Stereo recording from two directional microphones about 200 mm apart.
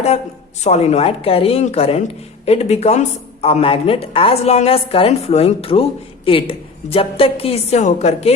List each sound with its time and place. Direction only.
0.6 s a woman's voice: 35° left (ahead or behind)